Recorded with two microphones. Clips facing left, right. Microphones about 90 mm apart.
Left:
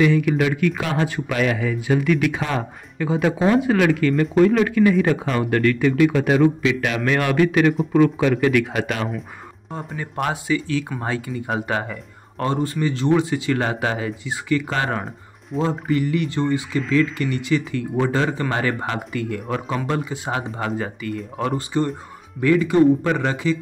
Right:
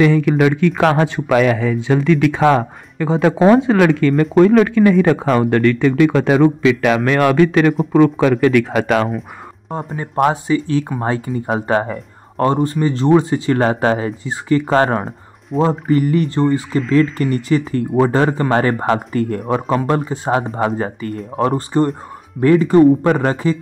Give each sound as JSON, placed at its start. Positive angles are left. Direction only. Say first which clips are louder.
{"t": 0.3, "sound": "a man's voice", "louder": "right 5 dB", "side_deg": -60}
{"t": 2.0, "sound": "speech", "louder": "right 5 dB", "side_deg": -35}
{"t": 3.2, "sound": "a man's voice", "louder": "right 7 dB", "side_deg": -60}
{"t": 3.9, "sound": "a man's voice", "louder": "right 5 dB", "side_deg": -45}
{"t": 5.8, "sound": "a man's voice", "louder": "right 4 dB", "side_deg": -50}
{"t": 6.0, "sound": "a man's voice", "louder": "right 4 dB", "side_deg": -80}
{"t": 6.4, "sound": "a man's voice", "louder": "right 5 dB", "side_deg": -50}
{"t": 7.9, "sound": "a man's voice", "louder": "right 7 dB", "side_deg": -75}
{"t": 8.3, "sound": "a man's voice", "louder": "right 5 dB", "side_deg": -50}
{"t": 8.7, "sound": "a man's voice", "louder": "right 9 dB", "side_deg": -70}
{"t": 9.9, "sound": "speech", "louder": "right 9 dB", "side_deg": -35}
{"t": 15.5, "sound": "music", "louder": "right 7 dB", "side_deg": 0}
{"t": 15.9, "sound": "speech", "louder": "right 6 dB", "side_deg": -40}